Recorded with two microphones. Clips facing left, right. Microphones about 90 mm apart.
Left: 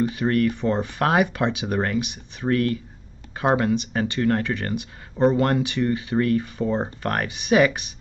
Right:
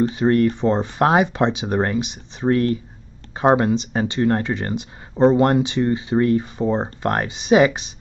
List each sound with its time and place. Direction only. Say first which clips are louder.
0.0 s speech: right 4 dB; 25° right (ahead or behind)